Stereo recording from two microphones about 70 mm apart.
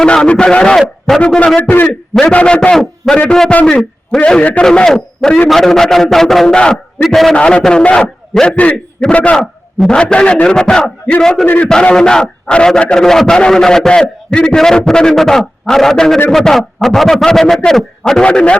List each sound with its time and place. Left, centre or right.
0.0 s a man's voice: centre
0.8 s a man's voice: centre
1.2 s a man's voice: centre
3.5 s a man's voice: centre
7.3 s a man's voice: centre
11.4 s a man's voice: left
11.7 s a man's voice: centre